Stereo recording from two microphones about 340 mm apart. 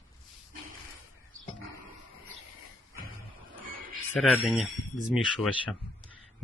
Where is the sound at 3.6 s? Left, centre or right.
Right.